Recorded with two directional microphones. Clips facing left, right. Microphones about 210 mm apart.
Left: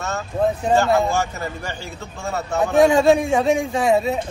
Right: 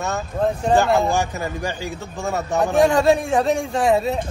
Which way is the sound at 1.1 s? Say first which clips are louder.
Right 1 dB; 15° right (ahead or behind).